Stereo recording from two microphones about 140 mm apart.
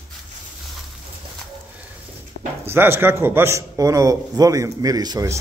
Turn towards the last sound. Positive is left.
turn(degrees=-25)  # may be behind; listen again after turning